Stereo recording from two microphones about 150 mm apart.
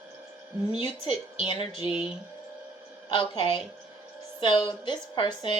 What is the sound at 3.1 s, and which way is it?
A woman's voice, 35° left (ahead or behind).